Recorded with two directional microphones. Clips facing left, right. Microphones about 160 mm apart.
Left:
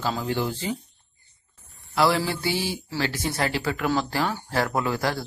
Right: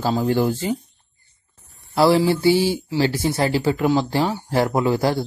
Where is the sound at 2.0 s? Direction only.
30° right (ahead or behind).